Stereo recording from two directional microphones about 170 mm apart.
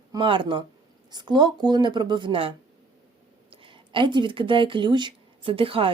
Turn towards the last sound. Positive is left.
turn(degrees=-30)  # may be behind; listen again after turning